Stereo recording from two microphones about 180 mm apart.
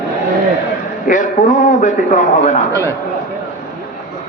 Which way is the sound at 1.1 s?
45° left (ahead or behind).